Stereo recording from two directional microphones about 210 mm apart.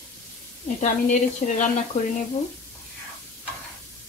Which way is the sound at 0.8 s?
35° left (ahead or behind).